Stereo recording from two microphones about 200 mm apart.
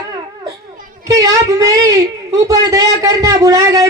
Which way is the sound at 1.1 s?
15° right (ahead or behind).